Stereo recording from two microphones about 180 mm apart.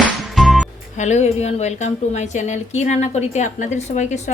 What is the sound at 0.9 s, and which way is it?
A woman's voice, 40° left (ahead or behind).